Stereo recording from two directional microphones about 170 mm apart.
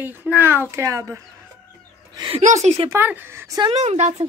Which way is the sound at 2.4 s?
40° right (ahead or behind).